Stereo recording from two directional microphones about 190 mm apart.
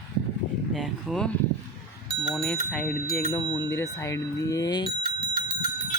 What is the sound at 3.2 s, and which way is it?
Speech, 10° left (ahead or behind).